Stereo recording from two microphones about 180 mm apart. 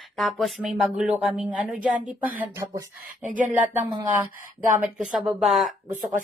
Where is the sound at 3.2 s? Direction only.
45° right (ahead or behind).